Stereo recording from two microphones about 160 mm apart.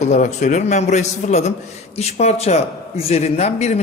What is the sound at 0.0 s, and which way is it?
A man's voice, 45° left (ahead or behind).